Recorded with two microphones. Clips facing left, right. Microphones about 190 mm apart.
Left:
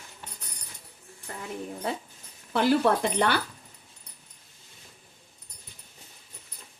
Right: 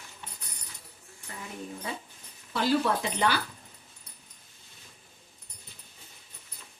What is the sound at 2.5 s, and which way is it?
Speech, 55° left (ahead or behind).